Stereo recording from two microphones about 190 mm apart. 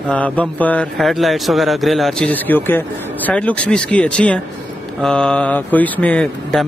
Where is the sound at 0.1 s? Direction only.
10° left (ahead or behind).